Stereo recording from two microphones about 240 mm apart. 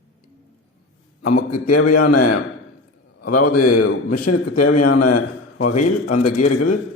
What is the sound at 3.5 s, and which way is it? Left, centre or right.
A man's voice, left.